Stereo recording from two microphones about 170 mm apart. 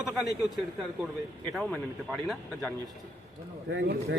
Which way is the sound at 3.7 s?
90° right.